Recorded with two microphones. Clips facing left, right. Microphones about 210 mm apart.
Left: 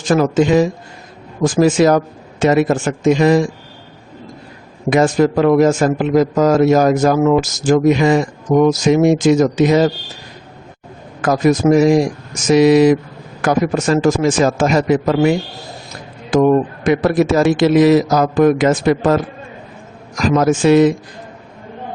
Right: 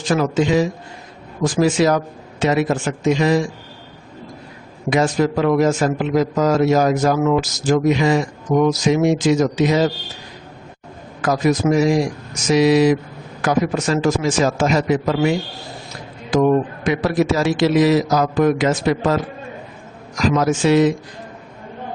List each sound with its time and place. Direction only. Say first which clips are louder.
0.1 s a man's voice: left 4 dB; 45° left (ahead or behind)
4.9 s a man's voice: left 4 dB; 50° left (ahead or behind)
11.2 s a man's voice: left 4 dB; 50° left (ahead or behind)